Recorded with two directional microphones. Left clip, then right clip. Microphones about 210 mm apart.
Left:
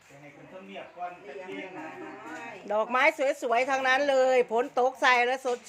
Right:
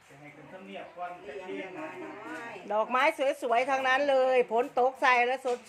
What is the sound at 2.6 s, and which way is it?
A woman's voice, 10° left (ahead or behind).